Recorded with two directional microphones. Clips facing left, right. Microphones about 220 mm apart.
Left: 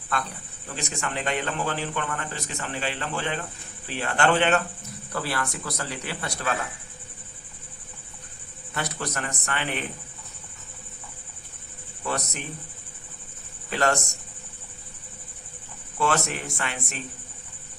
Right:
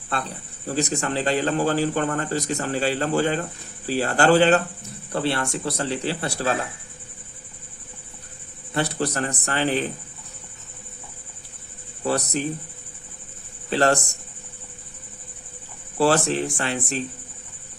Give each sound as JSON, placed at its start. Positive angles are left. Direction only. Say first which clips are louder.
{"t": 0.1, "sound": "speech", "louder": "right 2 dB", "side_deg": -30}
{"t": 8.7, "sound": "speech", "louder": "right 7 dB", "side_deg": -30}
{"t": 12.0, "sound": "speech", "louder": "right 7 dB", "side_deg": -35}
{"t": 13.7, "sound": "speech", "louder": "right 5 dB", "side_deg": -30}
{"t": 16.0, "sound": "speech", "louder": "right 6 dB", "side_deg": -35}